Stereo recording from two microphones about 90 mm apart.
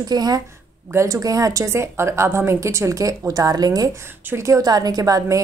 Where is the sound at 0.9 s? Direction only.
35° right (ahead or behind).